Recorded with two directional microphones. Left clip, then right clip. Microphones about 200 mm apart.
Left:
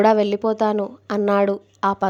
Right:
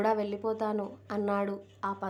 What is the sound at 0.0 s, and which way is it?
A woman's voice, 40° left (ahead or behind).